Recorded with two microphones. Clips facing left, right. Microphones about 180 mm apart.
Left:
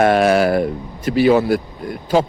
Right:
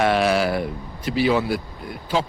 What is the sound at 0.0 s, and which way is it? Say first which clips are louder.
Speech: left 6 dB; 50° left (ahead or behind).